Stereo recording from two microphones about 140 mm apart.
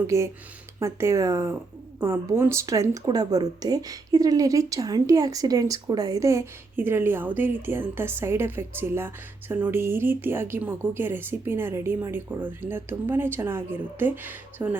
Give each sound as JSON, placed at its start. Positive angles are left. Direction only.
{"t": 0.1, "sound": "speech", "side_deg": -20}